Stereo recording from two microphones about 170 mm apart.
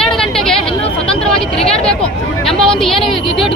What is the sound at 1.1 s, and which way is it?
Vehicle, 5° left (ahead or behind).